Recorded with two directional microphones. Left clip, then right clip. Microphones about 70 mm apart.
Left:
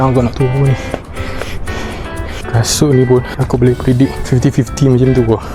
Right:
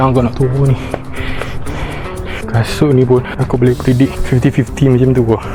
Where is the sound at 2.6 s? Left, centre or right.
Left.